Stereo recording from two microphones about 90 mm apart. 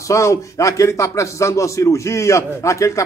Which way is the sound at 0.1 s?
35° left (ahead or behind).